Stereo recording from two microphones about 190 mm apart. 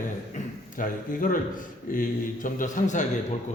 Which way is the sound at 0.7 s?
45° left (ahead or behind).